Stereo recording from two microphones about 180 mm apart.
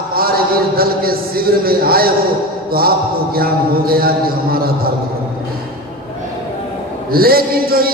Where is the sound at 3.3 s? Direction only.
55° right (ahead or behind).